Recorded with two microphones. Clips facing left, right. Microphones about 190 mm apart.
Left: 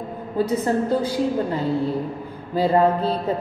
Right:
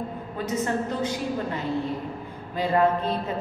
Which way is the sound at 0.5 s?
35° left (ahead or behind).